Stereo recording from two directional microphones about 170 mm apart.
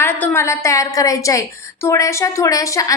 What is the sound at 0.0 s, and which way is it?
A woman's voice, 15° left (ahead or behind).